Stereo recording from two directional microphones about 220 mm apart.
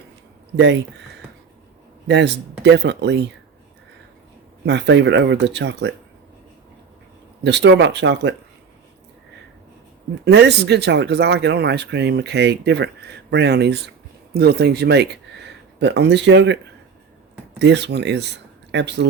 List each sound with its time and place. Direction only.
0.5 s speech: 50° right (ahead or behind)
2.0 s speech: 50° right (ahead or behind)
4.6 s speech: 50° right (ahead or behind)
7.4 s speech: 50° right (ahead or behind)
10.2 s speech: 50° right (ahead or behind)
17.6 s speech: 50° right (ahead or behind)